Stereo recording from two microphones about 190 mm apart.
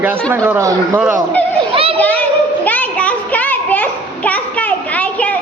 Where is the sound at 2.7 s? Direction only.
5° left (ahead or behind).